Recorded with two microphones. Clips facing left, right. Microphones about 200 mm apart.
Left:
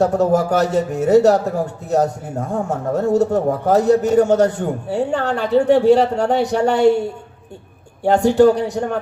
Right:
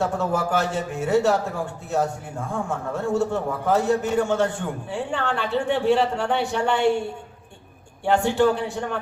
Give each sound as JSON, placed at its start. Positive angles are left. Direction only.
{"t": 0.0, "sound": "speech", "side_deg": 40}
{"t": 8.0, "sound": "speech", "side_deg": 40}